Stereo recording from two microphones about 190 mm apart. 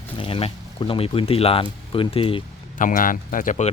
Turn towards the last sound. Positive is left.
turn(degrees=40)  # may be behind; listen again after turning